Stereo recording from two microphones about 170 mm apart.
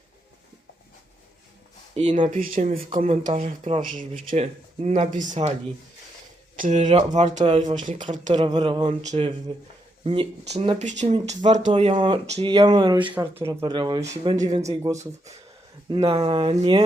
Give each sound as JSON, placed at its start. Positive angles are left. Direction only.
{"t": 2.0, "sound": "speech", "side_deg": -40}
{"t": 6.6, "sound": "speech", "side_deg": -40}
{"t": 8.4, "sound": "speech", "side_deg": -25}
{"t": 11.7, "sound": "speech", "side_deg": -35}
{"t": 12.6, "sound": "speech", "side_deg": -25}
{"t": 13.1, "sound": "speech", "side_deg": -15}
{"t": 13.7, "sound": "speech", "side_deg": -25}
{"t": 14.6, "sound": "speech", "side_deg": -20}